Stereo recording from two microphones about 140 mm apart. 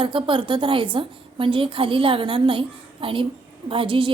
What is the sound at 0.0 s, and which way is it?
A woman's voice, 35° right (ahead or behind).